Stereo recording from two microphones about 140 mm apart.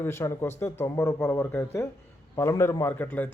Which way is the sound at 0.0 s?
15° left (ahead or behind).